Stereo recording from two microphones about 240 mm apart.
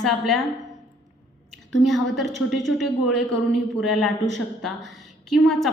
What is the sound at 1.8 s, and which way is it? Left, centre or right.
A woman's voice, centre.